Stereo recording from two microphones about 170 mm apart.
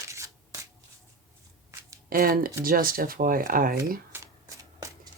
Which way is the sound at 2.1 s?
55° right (ahead or behind).